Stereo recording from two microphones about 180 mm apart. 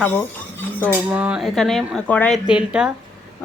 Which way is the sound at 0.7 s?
10° left (ahead or behind).